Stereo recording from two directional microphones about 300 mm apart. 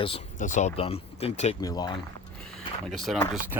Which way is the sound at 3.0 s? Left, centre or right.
Centre.